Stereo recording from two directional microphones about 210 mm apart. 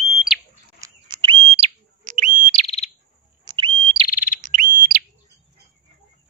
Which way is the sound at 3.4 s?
25° right (ahead or behind).